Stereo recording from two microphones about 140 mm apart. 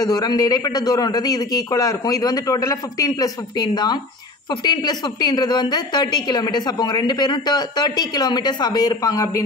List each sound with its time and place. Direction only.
0.0 s a woman's voice: 25° left (ahead or behind)